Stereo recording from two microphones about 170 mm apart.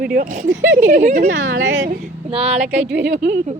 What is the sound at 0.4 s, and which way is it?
Speech, 90° right.